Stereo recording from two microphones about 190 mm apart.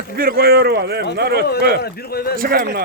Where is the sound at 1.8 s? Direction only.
55° left (ahead or behind).